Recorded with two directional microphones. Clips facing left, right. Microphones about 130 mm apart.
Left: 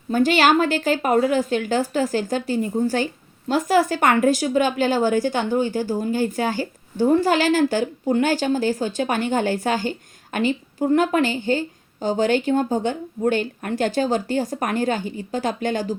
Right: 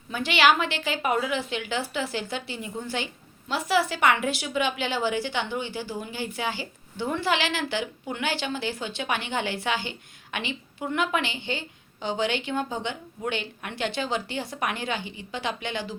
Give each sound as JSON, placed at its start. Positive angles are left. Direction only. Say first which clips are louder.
{"t": 0.1, "sound": "a woman's voice", "louder": "left 5 dB", "side_deg": 45}